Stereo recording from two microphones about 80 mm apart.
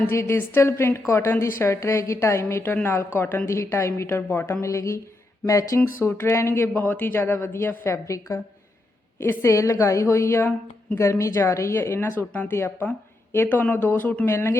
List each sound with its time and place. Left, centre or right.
0.1 s speech: left
14.3 s speech: left